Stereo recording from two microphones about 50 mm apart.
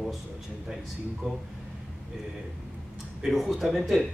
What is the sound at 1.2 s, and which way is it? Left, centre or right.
Speech, centre.